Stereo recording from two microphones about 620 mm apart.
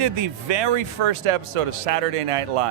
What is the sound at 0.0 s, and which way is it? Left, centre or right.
A man's voice, right.